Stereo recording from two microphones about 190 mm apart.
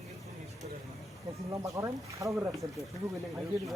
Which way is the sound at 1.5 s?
15° right (ahead or behind).